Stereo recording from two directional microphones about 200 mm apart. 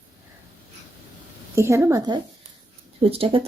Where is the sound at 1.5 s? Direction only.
15° right (ahead or behind).